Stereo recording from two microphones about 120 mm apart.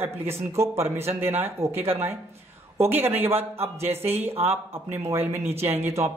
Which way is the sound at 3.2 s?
15° right (ahead or behind).